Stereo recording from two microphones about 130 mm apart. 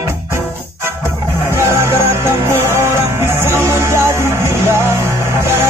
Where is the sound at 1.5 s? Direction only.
20° right (ahead or behind).